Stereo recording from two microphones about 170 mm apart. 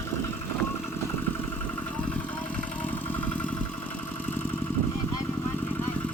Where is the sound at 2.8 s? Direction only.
10° left (ahead or behind).